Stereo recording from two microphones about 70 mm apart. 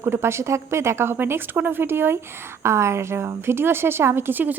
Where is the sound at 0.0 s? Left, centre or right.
Right.